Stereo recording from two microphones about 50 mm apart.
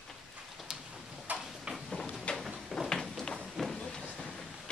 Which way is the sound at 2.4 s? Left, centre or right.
Centre.